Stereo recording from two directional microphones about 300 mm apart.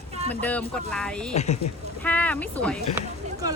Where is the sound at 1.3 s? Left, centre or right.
Left.